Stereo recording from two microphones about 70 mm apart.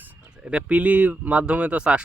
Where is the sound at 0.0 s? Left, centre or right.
Centre.